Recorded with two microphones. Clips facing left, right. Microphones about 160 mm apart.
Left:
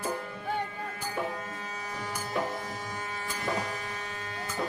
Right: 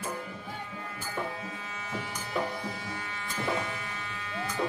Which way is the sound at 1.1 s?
45° left (ahead or behind).